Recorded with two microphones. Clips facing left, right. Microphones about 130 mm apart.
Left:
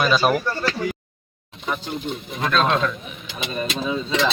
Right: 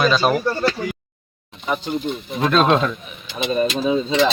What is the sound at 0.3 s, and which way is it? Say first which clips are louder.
Speech: right 3 dB; 30° right (ahead or behind).